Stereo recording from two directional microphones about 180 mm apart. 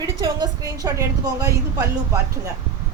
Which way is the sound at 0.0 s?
20° right (ahead or behind).